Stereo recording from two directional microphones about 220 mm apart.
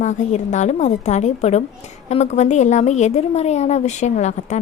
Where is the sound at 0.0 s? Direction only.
35° left (ahead or behind).